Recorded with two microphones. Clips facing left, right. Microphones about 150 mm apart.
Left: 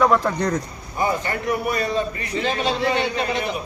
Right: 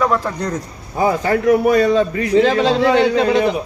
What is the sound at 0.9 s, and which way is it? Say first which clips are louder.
A man's voice: right 7 dB; 90° right.